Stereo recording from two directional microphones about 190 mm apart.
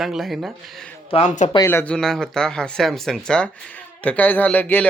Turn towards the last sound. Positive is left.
turn(degrees=10)  # may be behind; listen again after turning